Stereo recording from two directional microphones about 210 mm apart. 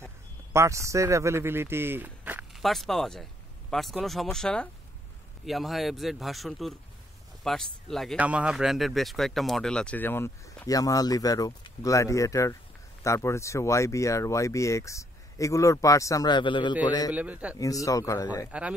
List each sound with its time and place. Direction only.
0.5 s speech: 15° right (ahead or behind); by 17.1 s 20° left (ahead or behind)
17.1 s speech: 5° right (ahead or behind)
17.6 s speech: 15° left (ahead or behind)